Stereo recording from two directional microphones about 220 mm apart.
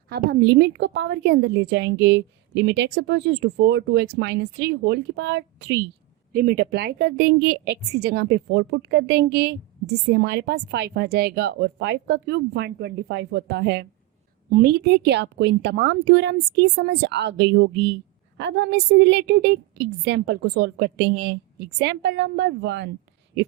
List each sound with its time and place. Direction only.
0.1 s a woman's voice: 50° right (ahead or behind)
6.3 s a woman's voice: 40° right (ahead or behind)